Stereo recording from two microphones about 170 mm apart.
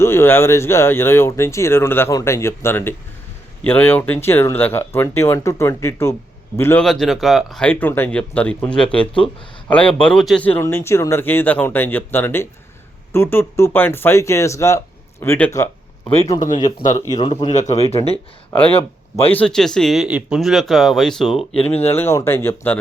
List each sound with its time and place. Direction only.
0.0 s speech: 15° left (ahead or behind)
6.8 s speech: centre (ahead or behind)
10.6 s speech: 15° left (ahead or behind)
16.7 s speech: 50° left (ahead or behind)
17.1 s speech: 25° left (ahead or behind)
17.5 s speech: 45° left (ahead or behind)
19.3 s speech: 5° left (ahead or behind)
21.8 s speech: 15° left (ahead or behind)